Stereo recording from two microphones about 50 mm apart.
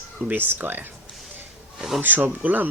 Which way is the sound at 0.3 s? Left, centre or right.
Right.